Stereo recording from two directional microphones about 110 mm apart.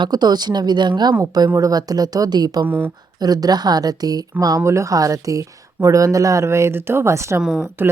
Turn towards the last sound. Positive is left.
turn(degrees=-20)  # may be behind; listen again after turning